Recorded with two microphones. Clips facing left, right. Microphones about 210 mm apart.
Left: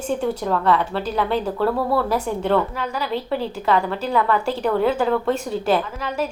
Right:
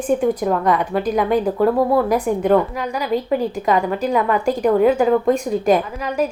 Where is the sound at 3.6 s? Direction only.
10° right (ahead or behind).